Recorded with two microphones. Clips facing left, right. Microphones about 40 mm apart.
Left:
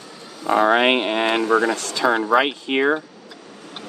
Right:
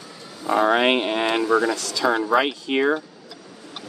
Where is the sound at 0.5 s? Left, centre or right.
Left.